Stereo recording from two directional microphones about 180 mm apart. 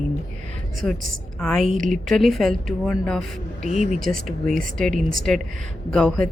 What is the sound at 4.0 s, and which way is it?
Speech, 50° right (ahead or behind).